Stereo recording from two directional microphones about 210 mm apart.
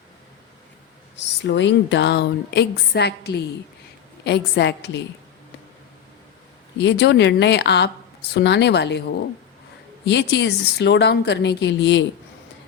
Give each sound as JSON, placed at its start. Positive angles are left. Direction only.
{"t": 1.1, "sound": "a woman's voice", "side_deg": 55}
{"t": 6.7, "sound": "a woman's voice", "side_deg": 55}